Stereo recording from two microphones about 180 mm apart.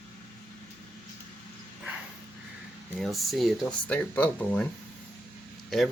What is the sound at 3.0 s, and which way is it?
Speech, centre (ahead or behind).